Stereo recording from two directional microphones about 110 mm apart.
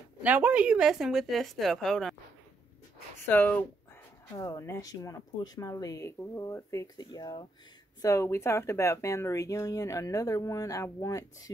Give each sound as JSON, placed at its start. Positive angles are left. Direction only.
{"t": 0.2, "sound": "a woman's voice", "side_deg": -15}
{"t": 3.3, "sound": "speech", "side_deg": 15}